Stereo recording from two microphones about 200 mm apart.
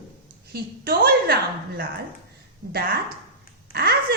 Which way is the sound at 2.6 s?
65° right (ahead or behind).